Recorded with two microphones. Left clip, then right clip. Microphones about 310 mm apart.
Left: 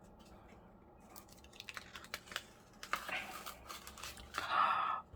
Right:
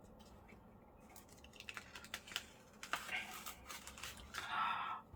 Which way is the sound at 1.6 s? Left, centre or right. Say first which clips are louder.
Left 2 dB; centre.